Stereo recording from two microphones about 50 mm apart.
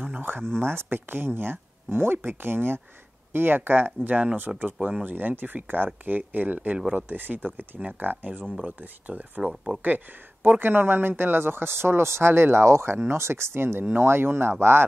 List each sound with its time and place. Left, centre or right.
0.0 s speech: right
4.5 s speech: centre
5.0 s speech: right
12.6 s speech: right
12.9 s speech: right
13.2 s speech: right